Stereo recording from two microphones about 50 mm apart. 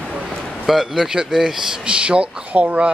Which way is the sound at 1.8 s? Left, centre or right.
Right.